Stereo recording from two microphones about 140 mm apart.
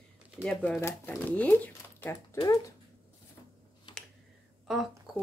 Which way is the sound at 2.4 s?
25° left (ahead or behind).